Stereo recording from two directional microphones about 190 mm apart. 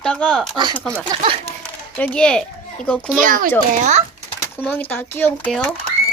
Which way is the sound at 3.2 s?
45° right (ahead or behind).